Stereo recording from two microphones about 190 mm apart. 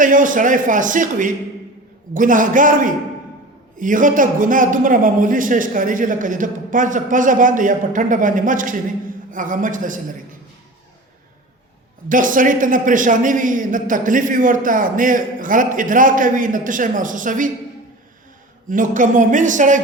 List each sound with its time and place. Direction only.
0.0 s a man's voice: 45° right (ahead or behind)
12.0 s a man's voice: 45° right (ahead or behind)
18.7 s speech: 45° right (ahead or behind)